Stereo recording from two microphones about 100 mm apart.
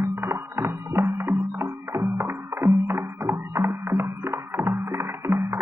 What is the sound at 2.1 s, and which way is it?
Music, 25° right (ahead or behind).